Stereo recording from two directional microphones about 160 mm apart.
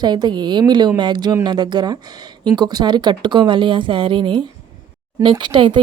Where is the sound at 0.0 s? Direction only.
25° right (ahead or behind).